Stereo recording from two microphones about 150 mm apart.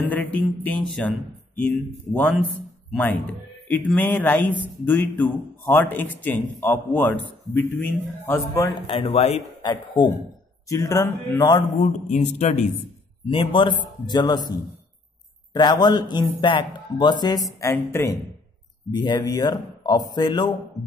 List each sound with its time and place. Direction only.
0.1 s a sound: 10° left (ahead or behind)
2.9 s a man's voice: 10° left (ahead or behind)
8.8 s a man's voice: 40° left (ahead or behind)
9.6 s a man's voice: 30° left (ahead or behind)
11.8 s speech: 50° left (ahead or behind)
13.3 s a man's voice: 35° left (ahead or behind); by 18.1 s 20° left (ahead or behind)
18.9 s a man's voice: 30° left (ahead or behind)